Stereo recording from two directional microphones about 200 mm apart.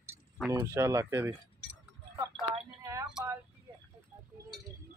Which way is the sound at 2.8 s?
15° right (ahead or behind).